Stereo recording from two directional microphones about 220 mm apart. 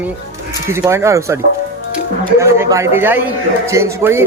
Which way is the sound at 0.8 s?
15° right (ahead or behind).